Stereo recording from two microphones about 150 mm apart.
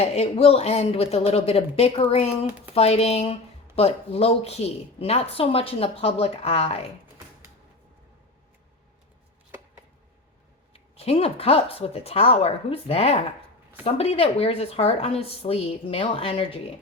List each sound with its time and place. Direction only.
0.0 s a woman's voice: 45° left (ahead or behind)
10.9 s a woman's voice: 40° left (ahead or behind)